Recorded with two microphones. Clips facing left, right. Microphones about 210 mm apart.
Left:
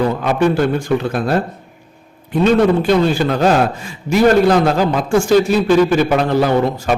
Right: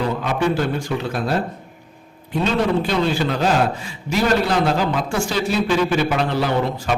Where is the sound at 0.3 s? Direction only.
55° left (ahead or behind).